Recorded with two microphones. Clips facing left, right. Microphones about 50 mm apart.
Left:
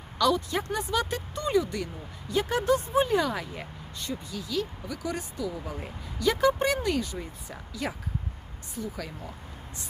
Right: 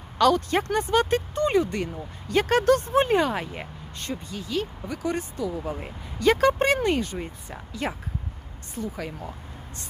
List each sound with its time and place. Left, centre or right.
0.2 s speech: right
2.2 s speech: right
6.1 s speech: right